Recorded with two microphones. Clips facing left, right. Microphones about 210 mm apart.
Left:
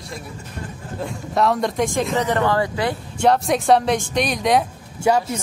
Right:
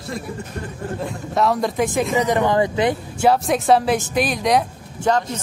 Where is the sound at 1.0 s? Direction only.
Centre (ahead or behind).